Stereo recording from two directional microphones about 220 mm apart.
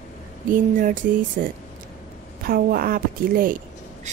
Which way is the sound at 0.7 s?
40° right (ahead or behind).